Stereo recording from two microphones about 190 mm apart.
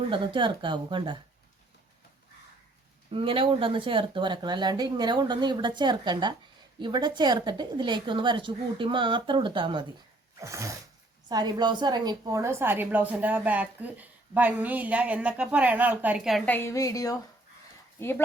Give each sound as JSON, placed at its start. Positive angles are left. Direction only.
{"t": 0.1, "sound": "speech", "side_deg": -25}
{"t": 3.1, "sound": "a woman's voice", "side_deg": -30}
{"t": 16.5, "sound": "a woman's voice", "side_deg": 15}